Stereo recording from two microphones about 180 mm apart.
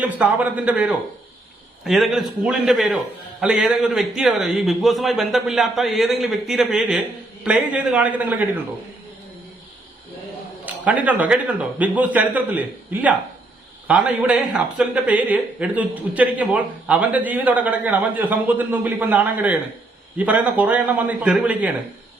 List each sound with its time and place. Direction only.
0.0 s a man's voice: 10° right (ahead or behind)
10.8 s a man's voice: 10° right (ahead or behind)